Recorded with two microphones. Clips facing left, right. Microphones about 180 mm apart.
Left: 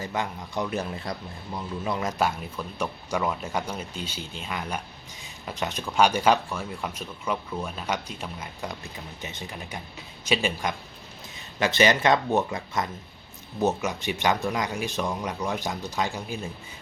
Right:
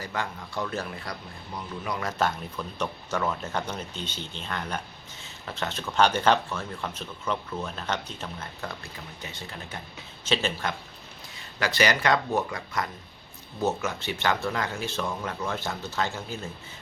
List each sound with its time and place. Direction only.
0.0 s speech: 20° left (ahead or behind)